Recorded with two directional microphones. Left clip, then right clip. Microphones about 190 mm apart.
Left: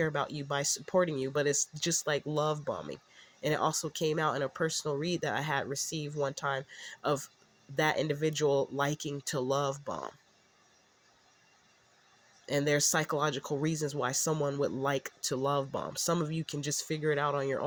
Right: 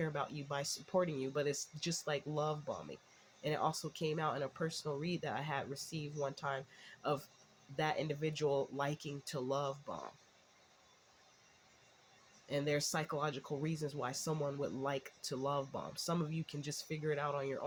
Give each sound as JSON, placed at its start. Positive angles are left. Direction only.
{"t": 0.0, "sound": "speech", "side_deg": 40}
{"t": 12.5, "sound": "speech", "side_deg": 45}